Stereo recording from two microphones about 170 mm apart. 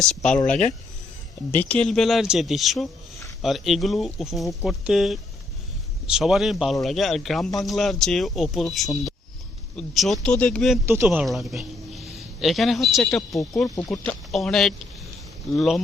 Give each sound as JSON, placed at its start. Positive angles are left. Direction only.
{"t": 0.0, "sound": "speech", "side_deg": 5}
{"t": 10.8, "sound": "a man's voice", "side_deg": -15}